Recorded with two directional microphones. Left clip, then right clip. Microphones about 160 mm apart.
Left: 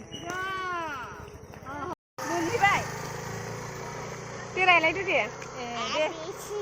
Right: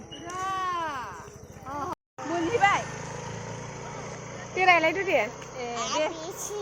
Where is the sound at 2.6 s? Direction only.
25° right (ahead or behind).